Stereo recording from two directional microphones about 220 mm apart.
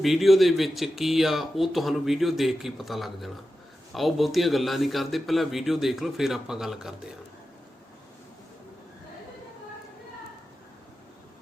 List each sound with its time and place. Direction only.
0.0 s speech: centre (ahead or behind)